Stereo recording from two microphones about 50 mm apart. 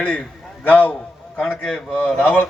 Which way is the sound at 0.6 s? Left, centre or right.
Left.